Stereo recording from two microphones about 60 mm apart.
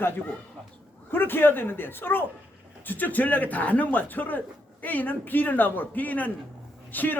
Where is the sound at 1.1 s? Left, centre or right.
Left.